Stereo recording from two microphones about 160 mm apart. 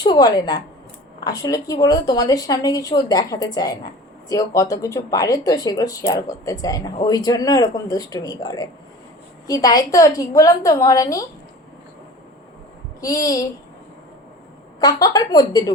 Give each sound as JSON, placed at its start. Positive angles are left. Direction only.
{"t": 0.0, "sound": "a woman's voice", "side_deg": 25}
{"t": 13.0, "sound": "speech", "side_deg": 20}
{"t": 14.8, "sound": "speech", "side_deg": 25}